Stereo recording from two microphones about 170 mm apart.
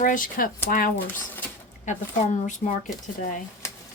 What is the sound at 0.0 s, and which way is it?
Speech, 55° left (ahead or behind).